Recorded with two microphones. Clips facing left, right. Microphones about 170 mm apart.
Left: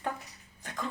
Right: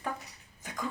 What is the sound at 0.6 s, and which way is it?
Dog, 15° right (ahead or behind).